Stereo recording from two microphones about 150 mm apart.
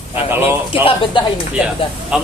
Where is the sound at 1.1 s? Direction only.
35° left (ahead or behind).